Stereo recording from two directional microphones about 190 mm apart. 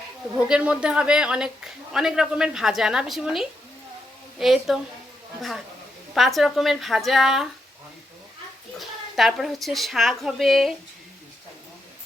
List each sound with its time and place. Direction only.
0.4 s a woman's voice: 5° right (ahead or behind)
8.8 s a woman's voice: centre (ahead or behind)